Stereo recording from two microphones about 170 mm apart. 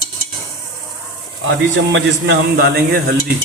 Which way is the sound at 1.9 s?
90° right.